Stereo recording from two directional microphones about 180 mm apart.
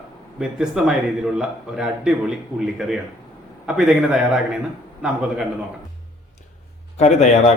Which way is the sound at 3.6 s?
5° right (ahead or behind).